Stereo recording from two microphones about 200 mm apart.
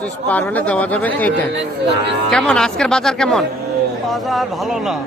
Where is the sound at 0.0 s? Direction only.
10° left (ahead or behind).